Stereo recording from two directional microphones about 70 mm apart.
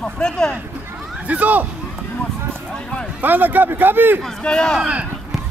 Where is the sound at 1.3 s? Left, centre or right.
Right.